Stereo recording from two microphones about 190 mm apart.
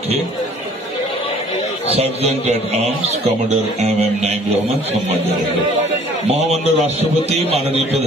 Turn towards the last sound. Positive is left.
turn(degrees=-30)  # may be behind; listen again after turning